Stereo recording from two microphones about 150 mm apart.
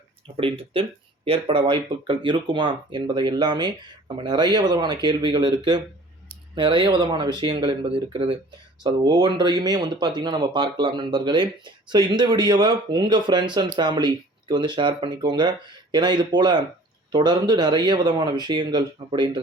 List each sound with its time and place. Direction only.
0.3 s speech: 40° right (ahead or behind)